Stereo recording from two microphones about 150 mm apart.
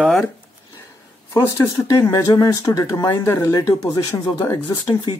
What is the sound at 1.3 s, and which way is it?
Speech, 20° left (ahead or behind).